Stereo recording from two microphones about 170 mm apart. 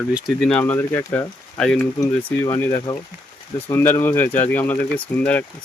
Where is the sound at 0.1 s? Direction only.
Centre (ahead or behind).